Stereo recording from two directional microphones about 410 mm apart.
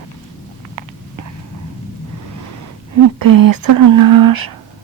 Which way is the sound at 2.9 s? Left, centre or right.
Right.